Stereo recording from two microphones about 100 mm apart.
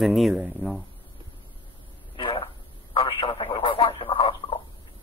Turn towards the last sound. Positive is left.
turn(degrees=60)  # may be behind; listen again after turning